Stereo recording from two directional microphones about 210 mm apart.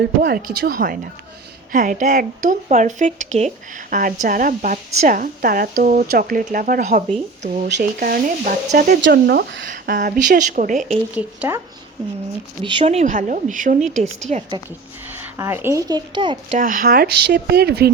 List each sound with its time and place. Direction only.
0.2 s speech: 45° right (ahead or behind)
9.6 s speech: 40° right (ahead or behind)
11.1 s speech: 10° right (ahead or behind)
12.6 s speech: 25° right (ahead or behind)
15.1 s speech: 10° right (ahead or behind)
16.6 s speech: 40° right (ahead or behind)